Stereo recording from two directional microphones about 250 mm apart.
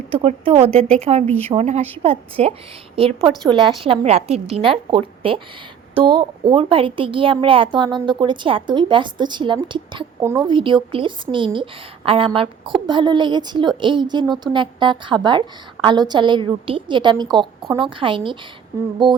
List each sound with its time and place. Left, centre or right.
0.1 s a woman's voice: right
19.0 s music: centre